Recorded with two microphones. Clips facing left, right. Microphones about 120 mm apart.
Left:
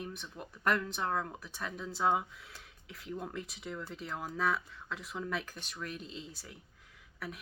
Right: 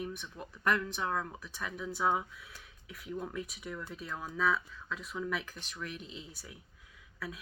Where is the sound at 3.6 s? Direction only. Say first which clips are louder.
Even; 25° left (ahead or behind).